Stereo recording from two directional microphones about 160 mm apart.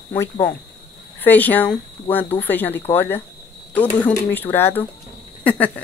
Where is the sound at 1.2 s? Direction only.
10° left (ahead or behind).